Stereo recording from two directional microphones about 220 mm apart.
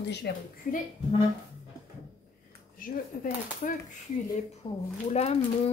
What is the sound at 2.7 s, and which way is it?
Speech, 40° left (ahead or behind).